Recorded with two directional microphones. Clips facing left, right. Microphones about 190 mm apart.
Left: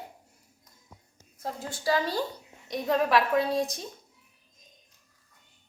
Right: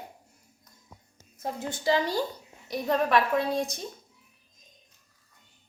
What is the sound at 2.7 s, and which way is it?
A woman's voice, centre (ahead or behind).